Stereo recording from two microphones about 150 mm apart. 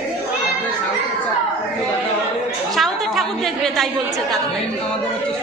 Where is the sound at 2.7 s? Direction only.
Centre (ahead or behind).